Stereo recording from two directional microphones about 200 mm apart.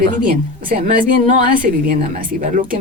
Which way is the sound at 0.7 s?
45° right (ahead or behind).